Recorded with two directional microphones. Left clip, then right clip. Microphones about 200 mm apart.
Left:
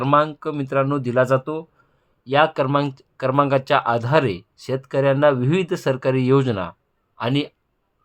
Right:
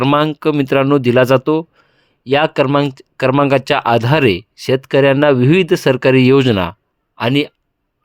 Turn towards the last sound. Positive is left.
turn(degrees=-35)  # may be behind; listen again after turning